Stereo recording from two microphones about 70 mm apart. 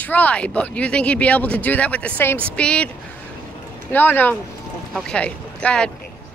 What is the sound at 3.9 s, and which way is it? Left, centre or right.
Speech, left.